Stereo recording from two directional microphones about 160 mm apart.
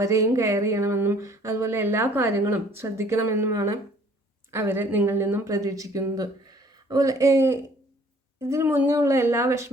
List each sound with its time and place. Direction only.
0.0 s speech: 20° right (ahead or behind)